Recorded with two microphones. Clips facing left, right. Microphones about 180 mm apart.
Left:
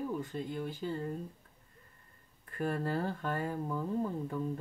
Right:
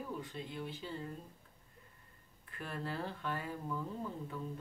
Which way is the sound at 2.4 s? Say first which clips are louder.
Left 8 dB; 45° left (ahead or behind).